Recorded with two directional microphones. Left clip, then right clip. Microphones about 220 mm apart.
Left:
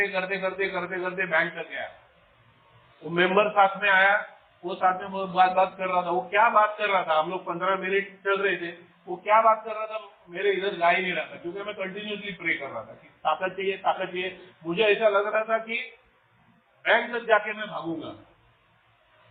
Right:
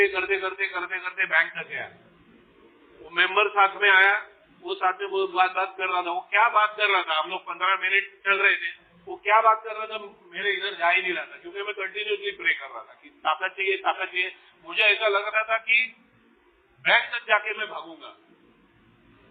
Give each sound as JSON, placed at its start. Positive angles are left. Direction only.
{"t": 0.0, "sound": "a man's voice", "side_deg": -45}
{"t": 3.2, "sound": "a man's voice", "side_deg": -45}
{"t": 16.8, "sound": "a man's voice", "side_deg": -55}